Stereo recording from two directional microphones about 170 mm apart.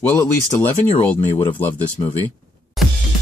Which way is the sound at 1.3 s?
25° left (ahead or behind).